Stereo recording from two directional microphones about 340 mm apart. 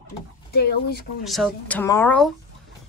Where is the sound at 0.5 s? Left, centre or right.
Left.